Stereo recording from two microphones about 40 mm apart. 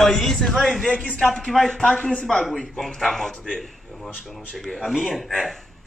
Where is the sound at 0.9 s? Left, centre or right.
Left.